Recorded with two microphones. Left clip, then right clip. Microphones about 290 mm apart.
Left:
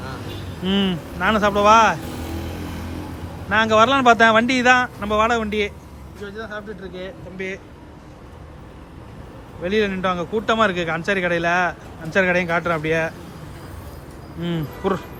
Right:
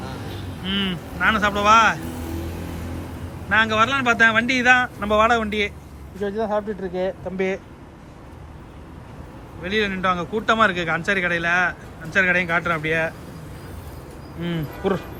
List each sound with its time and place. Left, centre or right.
0.6 s speech: centre
3.5 s speech: centre
6.2 s speech: right
6.9 s speech: centre
9.6 s a man's voice: centre
14.4 s speech: centre